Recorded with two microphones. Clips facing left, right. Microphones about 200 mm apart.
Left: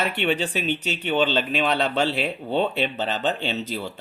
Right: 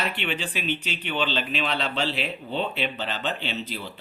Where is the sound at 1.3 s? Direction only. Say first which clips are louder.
Left 5 dB; 45° left (ahead or behind).